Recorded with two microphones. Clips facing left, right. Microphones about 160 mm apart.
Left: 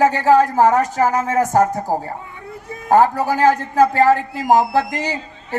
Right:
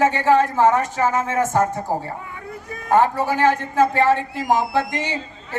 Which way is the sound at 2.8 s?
40° left (ahead or behind).